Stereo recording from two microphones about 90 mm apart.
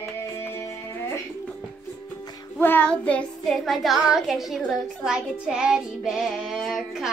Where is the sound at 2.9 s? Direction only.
10° left (ahead or behind).